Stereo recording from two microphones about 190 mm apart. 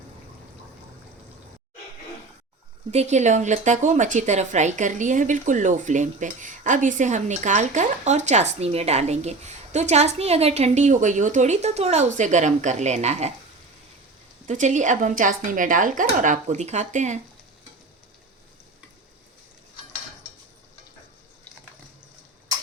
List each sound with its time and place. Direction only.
2.9 s a woman's voice: 35° right (ahead or behind)
14.4 s a woman's voice: 40° right (ahead or behind)